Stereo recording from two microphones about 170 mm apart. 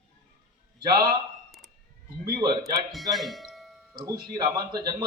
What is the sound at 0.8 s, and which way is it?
Speech, 25° right (ahead or behind).